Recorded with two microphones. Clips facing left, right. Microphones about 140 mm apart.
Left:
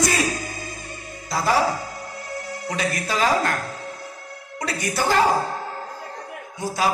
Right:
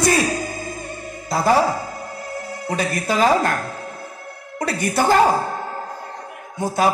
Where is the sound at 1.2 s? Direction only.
55° right (ahead or behind).